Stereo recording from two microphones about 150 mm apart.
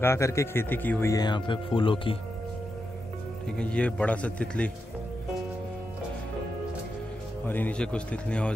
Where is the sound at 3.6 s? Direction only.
5° left (ahead or behind).